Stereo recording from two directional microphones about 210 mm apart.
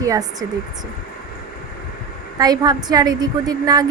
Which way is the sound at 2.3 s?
20° right (ahead or behind).